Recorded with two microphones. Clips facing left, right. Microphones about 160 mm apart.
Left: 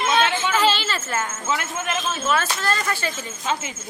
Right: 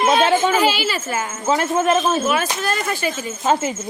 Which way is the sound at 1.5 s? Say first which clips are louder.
Right 14 dB; 35° right (ahead or behind).